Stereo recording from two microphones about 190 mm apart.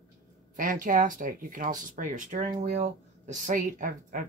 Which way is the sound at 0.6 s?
45° right (ahead or behind).